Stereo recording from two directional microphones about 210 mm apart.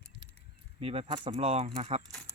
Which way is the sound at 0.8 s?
25° right (ahead or behind).